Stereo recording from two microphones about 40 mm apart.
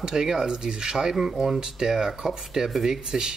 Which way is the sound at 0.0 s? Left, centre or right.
Centre.